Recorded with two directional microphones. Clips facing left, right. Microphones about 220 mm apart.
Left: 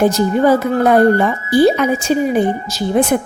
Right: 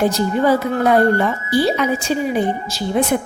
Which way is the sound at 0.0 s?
45° left (ahead or behind).